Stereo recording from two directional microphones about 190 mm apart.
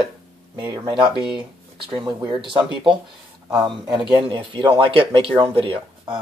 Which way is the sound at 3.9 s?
25° right (ahead or behind).